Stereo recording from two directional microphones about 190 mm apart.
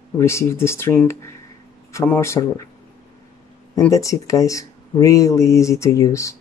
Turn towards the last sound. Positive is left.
turn(degrees=15)  # may be behind; listen again after turning